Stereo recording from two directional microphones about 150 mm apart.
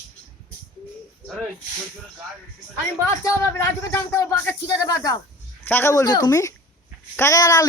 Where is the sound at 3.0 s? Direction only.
20° left (ahead or behind).